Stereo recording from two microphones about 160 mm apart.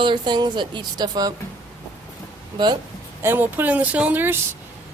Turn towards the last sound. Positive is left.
turn(degrees=-10)  # may be behind; listen again after turning